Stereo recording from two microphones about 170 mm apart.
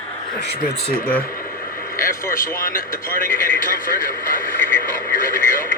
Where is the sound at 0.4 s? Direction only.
65° left (ahead or behind).